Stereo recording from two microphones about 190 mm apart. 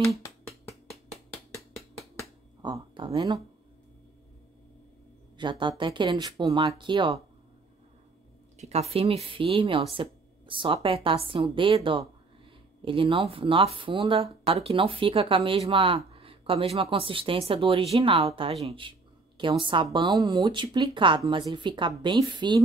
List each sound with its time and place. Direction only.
2.6 s speech: 25° right (ahead or behind)
5.4 s speech: 25° right (ahead or behind)
8.5 s speech: 35° right (ahead or behind)